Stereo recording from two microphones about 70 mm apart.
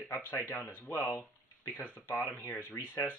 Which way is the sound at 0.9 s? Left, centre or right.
Left.